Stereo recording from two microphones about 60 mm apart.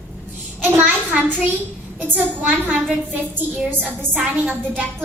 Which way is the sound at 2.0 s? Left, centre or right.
Right.